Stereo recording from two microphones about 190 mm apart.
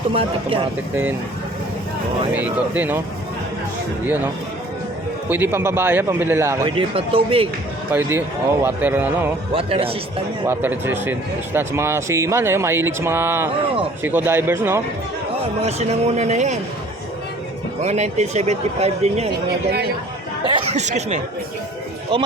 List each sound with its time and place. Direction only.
0.1 s speech: 30° right (ahead or behind)
2.3 s a man's voice: 10° right (ahead or behind)
4.0 s a man's voice: 10° right (ahead or behind)
5.3 s a man's voice: 10° right (ahead or behind)
6.7 s speech: 30° right (ahead or behind)
7.9 s a man's voice: 10° right (ahead or behind)
9.5 s speech: 30° right (ahead or behind)
10.4 s a man's voice: 10° right (ahead or behind)
15.6 s speech: 35° right (ahead or behind)
17.8 s speech: 35° right (ahead or behind)
20.4 s speech: 25° right (ahead or behind)